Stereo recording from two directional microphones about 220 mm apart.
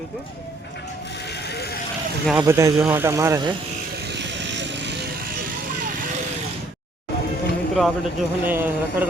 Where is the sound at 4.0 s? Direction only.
50° right (ahead or behind).